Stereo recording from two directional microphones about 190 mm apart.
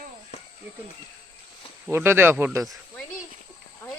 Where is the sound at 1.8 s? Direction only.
10° right (ahead or behind).